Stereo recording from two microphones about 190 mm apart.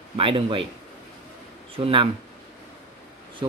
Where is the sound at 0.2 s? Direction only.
30° right (ahead or behind).